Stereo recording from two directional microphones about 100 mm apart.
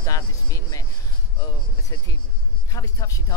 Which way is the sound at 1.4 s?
35° left (ahead or behind).